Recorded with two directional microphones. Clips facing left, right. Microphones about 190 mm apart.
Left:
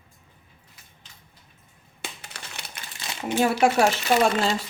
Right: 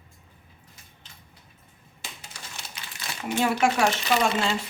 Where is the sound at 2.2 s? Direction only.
65° left (ahead or behind).